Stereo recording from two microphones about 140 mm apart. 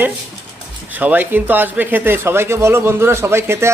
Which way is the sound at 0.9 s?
10° right (ahead or behind).